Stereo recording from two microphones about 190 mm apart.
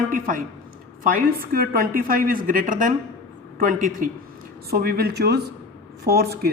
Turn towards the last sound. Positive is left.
turn(degrees=-55)  # may be behind; listen again after turning